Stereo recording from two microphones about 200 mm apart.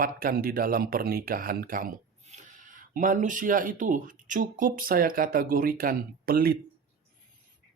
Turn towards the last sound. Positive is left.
turn(degrees=-50)  # may be behind; listen again after turning